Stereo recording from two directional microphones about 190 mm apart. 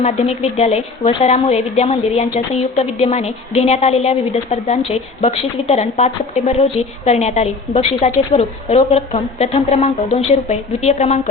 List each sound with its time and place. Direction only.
0.0 s speech: 35° left (ahead or behind)